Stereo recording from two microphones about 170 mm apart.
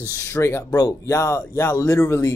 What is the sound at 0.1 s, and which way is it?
Speech, 15° left (ahead or behind).